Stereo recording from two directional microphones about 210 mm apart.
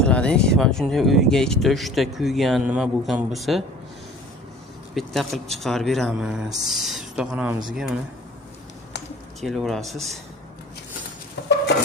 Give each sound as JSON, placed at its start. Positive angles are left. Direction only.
{"t": 0.0, "sound": "speech", "side_deg": 5}
{"t": 4.9, "sound": "speech", "side_deg": 0}
{"t": 9.4, "sound": "speech", "side_deg": 0}
{"t": 11.4, "sound": "a sound", "side_deg": 55}